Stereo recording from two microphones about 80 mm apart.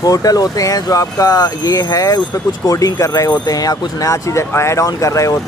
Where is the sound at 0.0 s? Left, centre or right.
Left.